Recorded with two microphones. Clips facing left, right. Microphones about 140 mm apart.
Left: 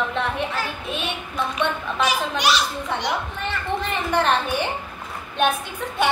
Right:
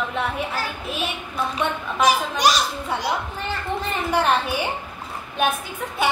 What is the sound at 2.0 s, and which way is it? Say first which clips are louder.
Speech: right 4 dB; 40° right (ahead or behind).